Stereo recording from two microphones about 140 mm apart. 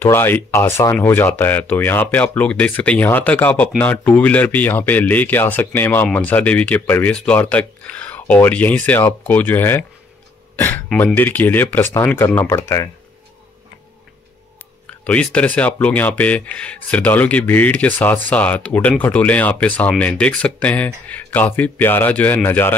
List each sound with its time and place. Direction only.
0.0 s speech: 15° left (ahead or behind)
10.5 s throat clearing: 10° left (ahead or behind)
11.1 s speech: 15° left (ahead or behind)
15.0 s speech: 10° left (ahead or behind)